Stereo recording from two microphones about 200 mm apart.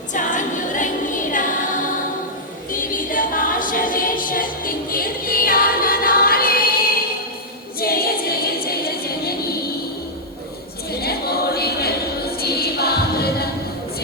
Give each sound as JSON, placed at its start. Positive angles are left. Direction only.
{"t": 0.1, "sound": "music", "side_deg": 40}
{"t": 2.7, "sound": "music", "side_deg": 40}
{"t": 7.8, "sound": "a sound", "side_deg": 50}
{"t": 11.0, "sound": "choir", "side_deg": 50}